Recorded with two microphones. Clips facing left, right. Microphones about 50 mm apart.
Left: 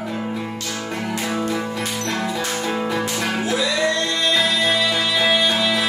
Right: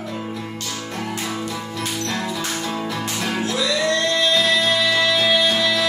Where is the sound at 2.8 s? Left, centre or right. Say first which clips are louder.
Left 3 dB; left.